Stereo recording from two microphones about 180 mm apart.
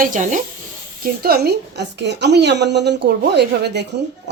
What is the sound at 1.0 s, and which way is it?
A woman's voice, 60° right (ahead or behind).